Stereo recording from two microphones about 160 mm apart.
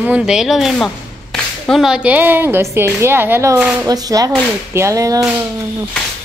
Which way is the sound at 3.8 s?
25° right (ahead or behind).